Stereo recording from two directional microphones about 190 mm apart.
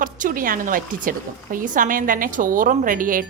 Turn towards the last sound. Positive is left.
turn(degrees=-45)  # may be behind; listen again after turning